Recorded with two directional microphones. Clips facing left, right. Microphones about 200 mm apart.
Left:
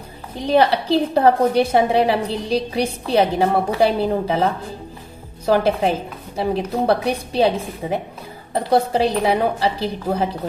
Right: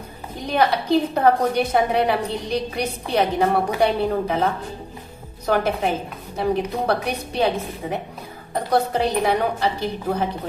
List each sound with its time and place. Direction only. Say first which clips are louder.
0.4 s a woman's voice: left 4 dB; 30° left (ahead or behind)
5.5 s a woman's voice: left 4 dB; 30° left (ahead or behind)